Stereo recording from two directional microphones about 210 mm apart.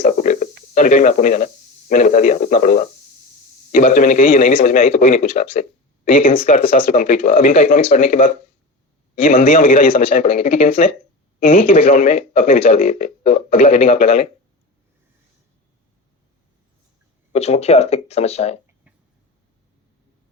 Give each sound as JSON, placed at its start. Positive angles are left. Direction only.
{"t": 0.0, "sound": "a sound", "side_deg": 35}
{"t": 1.9, "sound": "a man's voice", "side_deg": 40}
{"t": 9.9, "sound": "speech", "side_deg": 25}
{"t": 10.2, "sound": "speech", "side_deg": 40}
{"t": 10.5, "sound": "speech", "side_deg": 25}
{"t": 12.1, "sound": "speech", "side_deg": 30}
{"t": 12.9, "sound": "speech", "side_deg": 40}
{"t": 13.7, "sound": "speech", "side_deg": 25}
{"t": 17.3, "sound": "speech", "side_deg": 30}